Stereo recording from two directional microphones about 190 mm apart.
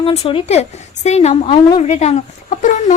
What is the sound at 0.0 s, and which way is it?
A woman's voice, 30° left (ahead or behind).